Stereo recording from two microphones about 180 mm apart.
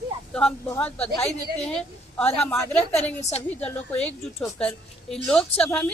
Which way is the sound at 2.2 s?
35° left (ahead or behind).